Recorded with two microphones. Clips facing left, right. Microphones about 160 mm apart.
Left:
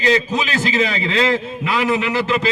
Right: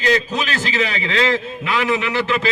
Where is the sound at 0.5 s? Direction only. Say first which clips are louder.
Left 4 dB; 35° left (ahead or behind).